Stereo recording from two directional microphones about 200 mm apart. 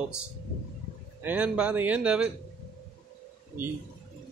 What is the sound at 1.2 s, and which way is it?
A man's voice, 10° right (ahead or behind).